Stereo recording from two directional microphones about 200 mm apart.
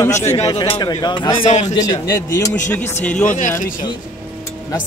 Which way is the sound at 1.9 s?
15° left (ahead or behind).